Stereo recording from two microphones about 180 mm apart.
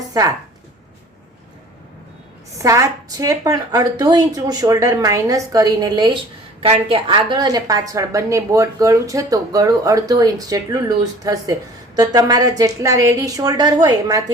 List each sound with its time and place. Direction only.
0.1 s a woman's voice: 20° right (ahead or behind)
2.6 s a woman's voice: 15° right (ahead or behind)